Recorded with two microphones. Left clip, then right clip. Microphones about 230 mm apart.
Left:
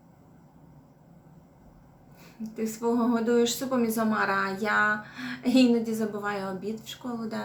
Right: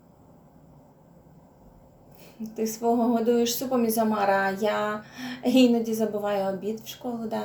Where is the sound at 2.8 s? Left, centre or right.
Centre.